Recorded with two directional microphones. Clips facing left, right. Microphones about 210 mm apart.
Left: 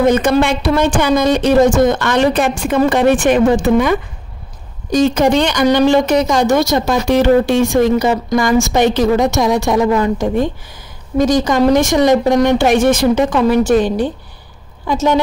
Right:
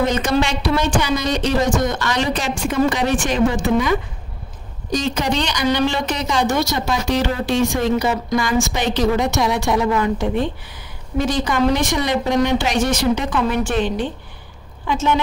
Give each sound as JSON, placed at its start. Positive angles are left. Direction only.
{"t": 0.0, "sound": "speech", "side_deg": 55}
{"t": 4.9, "sound": "speech", "side_deg": 50}